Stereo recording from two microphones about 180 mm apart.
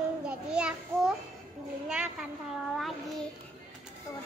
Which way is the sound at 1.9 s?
5° right (ahead or behind).